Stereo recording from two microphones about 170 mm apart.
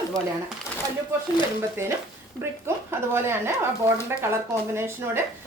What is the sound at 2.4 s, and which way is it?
Speech, 15° right (ahead or behind).